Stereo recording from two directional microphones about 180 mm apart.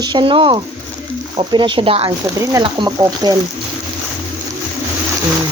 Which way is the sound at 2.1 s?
20° right (ahead or behind).